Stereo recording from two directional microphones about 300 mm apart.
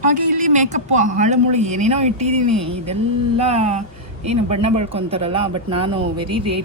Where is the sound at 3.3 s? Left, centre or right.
Right.